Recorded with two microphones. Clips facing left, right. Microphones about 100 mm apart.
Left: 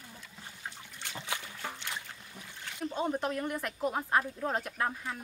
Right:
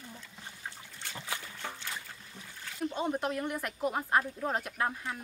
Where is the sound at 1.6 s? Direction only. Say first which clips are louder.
Left 1 dB; 20° left (ahead or behind).